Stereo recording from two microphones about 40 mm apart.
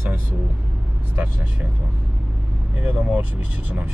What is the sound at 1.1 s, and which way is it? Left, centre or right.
Speech, right.